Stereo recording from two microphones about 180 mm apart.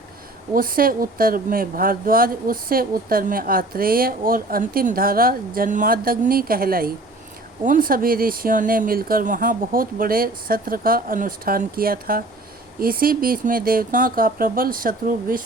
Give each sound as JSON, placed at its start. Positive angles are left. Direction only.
{"t": 0.5, "sound": "speech", "side_deg": -50}